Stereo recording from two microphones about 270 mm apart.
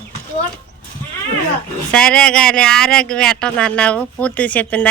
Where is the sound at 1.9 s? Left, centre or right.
Centre.